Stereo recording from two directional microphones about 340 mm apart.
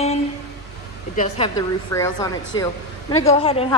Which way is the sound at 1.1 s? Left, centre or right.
Centre.